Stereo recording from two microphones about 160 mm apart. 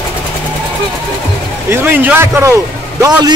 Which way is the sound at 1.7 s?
15° right (ahead or behind).